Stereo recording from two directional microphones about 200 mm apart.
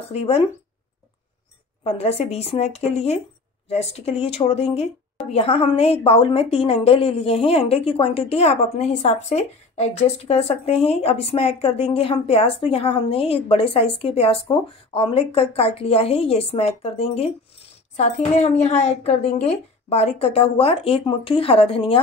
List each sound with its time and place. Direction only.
0.1 s speech: 30° left (ahead or behind)
1.8 s a woman's voice: 30° left (ahead or behind)